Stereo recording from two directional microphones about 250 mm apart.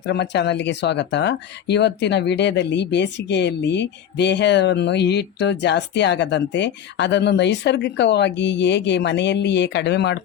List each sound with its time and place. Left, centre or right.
0.0 s speech: left